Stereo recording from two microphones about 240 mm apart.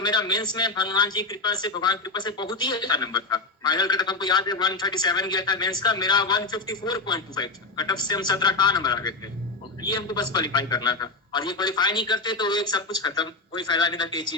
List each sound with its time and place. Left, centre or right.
0.0 s a man's voice: centre